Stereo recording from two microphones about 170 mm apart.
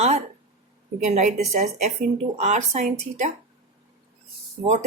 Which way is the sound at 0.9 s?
45° right (ahead or behind).